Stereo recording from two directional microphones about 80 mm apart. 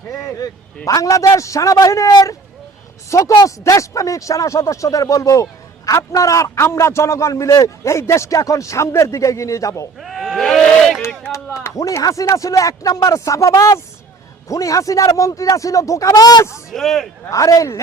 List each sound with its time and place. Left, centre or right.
0.1 s speech: left
10.0 s a sound: centre
11.4 s speech: left
16.7 s speech: centre
17.2 s speech: left